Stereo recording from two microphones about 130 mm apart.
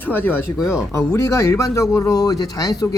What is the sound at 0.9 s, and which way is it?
Speech, 20° left (ahead or behind).